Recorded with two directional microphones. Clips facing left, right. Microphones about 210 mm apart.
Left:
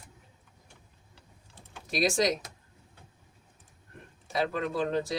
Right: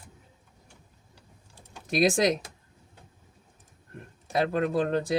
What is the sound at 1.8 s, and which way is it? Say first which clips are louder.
Speech: right 4 dB; 50° right (ahead or behind).